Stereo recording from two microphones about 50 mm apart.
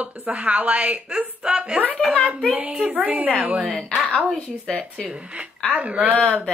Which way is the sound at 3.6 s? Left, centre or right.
Centre.